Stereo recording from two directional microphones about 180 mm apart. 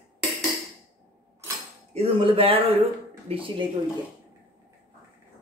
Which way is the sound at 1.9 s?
30° right (ahead or behind).